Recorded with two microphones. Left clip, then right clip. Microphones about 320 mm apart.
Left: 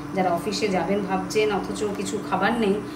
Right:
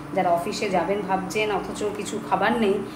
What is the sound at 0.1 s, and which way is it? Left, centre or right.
A woman's voice, centre.